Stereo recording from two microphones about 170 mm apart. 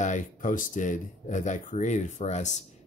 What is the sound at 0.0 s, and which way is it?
Speech, 50° left (ahead or behind).